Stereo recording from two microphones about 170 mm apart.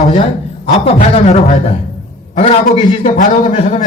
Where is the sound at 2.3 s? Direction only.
55° left (ahead or behind).